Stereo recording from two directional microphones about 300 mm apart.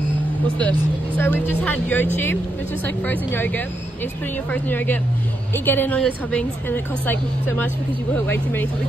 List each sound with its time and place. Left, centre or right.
1.1 s speech: centre
3.1 s a woman's voice: centre